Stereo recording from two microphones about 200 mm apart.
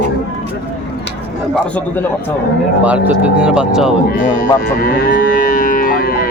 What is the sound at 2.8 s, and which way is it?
Speech, 5° right (ahead or behind).